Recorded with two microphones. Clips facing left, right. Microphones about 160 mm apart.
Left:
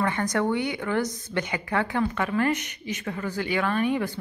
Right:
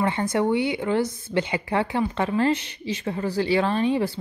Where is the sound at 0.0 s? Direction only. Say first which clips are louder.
Right 2 dB; 25° right (ahead or behind).